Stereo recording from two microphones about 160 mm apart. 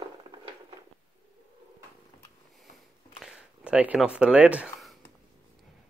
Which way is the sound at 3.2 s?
5° right (ahead or behind).